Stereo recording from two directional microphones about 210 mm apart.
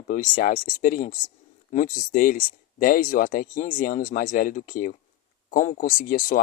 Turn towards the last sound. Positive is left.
turn(degrees=40)  # may be behind; listen again after turning